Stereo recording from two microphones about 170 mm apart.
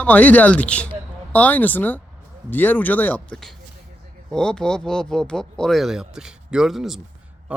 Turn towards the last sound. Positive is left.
turn(degrees=0)  # may be behind; listen again after turning